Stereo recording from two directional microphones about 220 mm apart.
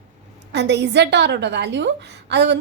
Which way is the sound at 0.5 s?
50° right (ahead or behind).